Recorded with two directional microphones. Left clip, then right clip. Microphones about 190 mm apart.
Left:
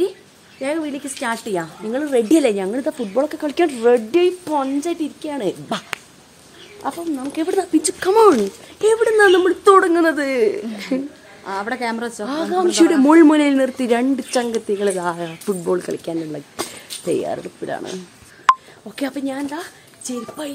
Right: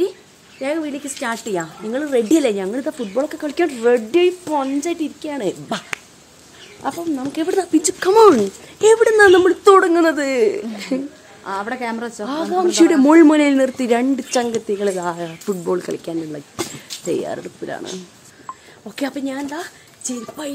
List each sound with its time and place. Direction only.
0.6 s a woman's voice: 5° left (ahead or behind); by 8.4 s 15° right (ahead or behind)
8.8 s a woman's voice: 35° right (ahead or behind)
9.4 s a woman's voice: 15° right (ahead or behind)
14.5 s a woman's voice: centre (ahead or behind)
18.9 s speech: 15° right (ahead or behind)
20.4 s speech: 5° right (ahead or behind)